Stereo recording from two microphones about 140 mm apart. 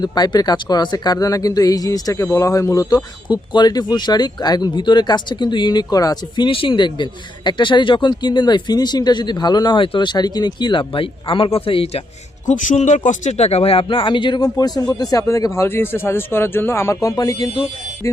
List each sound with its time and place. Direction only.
0.0 s speech: 30° left (ahead or behind)
12.5 s speech: 60° left (ahead or behind); by 18.2 s 20° left (ahead or behind)